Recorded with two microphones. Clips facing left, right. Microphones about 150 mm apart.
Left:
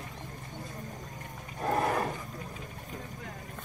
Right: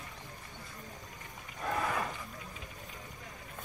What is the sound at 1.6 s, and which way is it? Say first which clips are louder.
Wild animals: left 5 dB; 45° left (ahead or behind).